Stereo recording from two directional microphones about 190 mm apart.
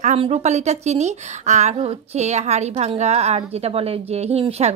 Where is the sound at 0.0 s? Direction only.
35° right (ahead or behind).